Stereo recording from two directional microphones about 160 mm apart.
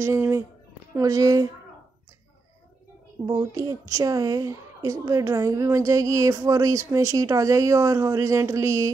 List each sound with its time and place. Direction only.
0.0 s a woman's voice: 15° right (ahead or behind)
3.3 s a woman's voice: 20° right (ahead or behind)